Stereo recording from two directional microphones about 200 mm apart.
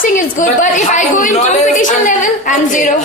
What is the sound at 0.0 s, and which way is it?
A woman's voice, 40° left (ahead or behind).